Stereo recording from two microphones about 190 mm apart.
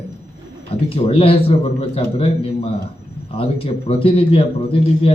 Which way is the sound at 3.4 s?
30° left (ahead or behind).